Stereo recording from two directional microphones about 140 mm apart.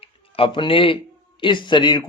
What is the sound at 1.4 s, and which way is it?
Speech, 35° left (ahead or behind).